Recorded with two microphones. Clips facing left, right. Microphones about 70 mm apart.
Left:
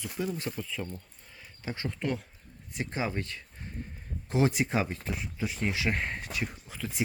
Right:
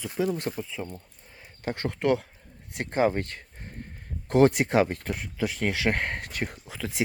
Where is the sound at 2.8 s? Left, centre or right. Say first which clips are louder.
Right 8 dB; right.